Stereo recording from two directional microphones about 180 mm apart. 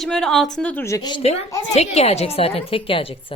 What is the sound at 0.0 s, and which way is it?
A woman's voice, 5° left (ahead or behind).